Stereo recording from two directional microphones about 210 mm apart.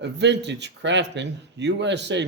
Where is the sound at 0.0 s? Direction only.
55° right (ahead or behind).